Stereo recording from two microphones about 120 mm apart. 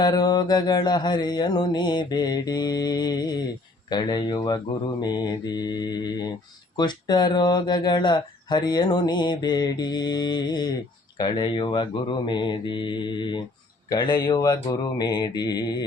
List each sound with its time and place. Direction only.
0.0 s mantra: 35° left (ahead or behind)